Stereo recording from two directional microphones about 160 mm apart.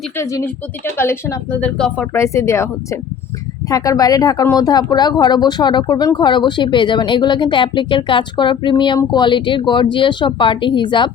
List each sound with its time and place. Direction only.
0.2 s speech: 20° left (ahead or behind)